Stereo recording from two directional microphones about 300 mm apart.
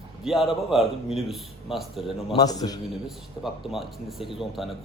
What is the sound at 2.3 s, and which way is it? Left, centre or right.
Speech, centre.